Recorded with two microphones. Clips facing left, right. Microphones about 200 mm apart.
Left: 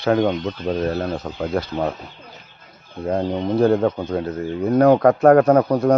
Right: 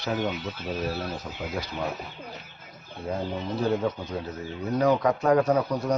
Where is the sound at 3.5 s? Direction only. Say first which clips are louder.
Left 9 dB; 55° left (ahead or behind).